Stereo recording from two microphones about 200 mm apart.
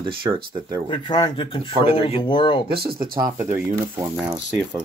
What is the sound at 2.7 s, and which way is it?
Speech, 50° right (ahead or behind).